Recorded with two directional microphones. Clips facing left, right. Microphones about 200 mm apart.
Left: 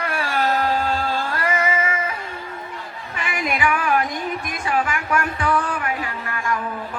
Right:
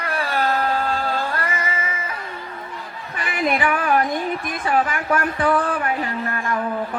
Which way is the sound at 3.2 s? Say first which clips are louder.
Right 2 dB; 35° right (ahead or behind).